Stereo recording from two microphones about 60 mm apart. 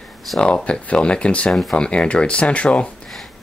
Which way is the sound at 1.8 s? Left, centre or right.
Centre.